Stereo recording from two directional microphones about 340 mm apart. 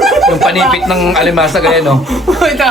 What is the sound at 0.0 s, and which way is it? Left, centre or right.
Speech, centre.